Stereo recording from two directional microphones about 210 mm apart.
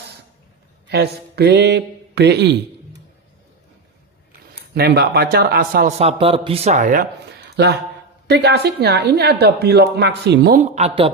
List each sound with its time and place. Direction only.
0.9 s speech: 50° right (ahead or behind)
4.7 s a man's voice: 50° right (ahead or behind)
7.5 s a woman's voice: 55° right (ahead or behind)
10.6 s a man's voice: 30° right (ahead or behind)